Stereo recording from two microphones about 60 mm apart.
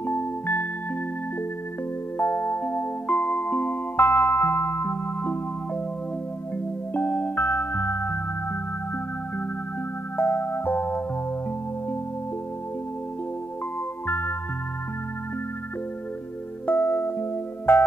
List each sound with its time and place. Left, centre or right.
0.0 s music: left
2.1 s music: left
6.9 s music: left
10.1 s music: left
14.0 s music: left
16.6 s music: left